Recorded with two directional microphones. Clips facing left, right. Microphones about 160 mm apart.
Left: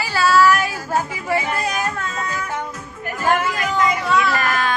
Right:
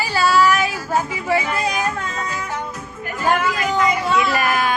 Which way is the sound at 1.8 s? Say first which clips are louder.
Right 1 dB; 15° right (ahead or behind).